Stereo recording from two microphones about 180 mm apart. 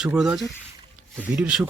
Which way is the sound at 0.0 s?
5° right (ahead or behind).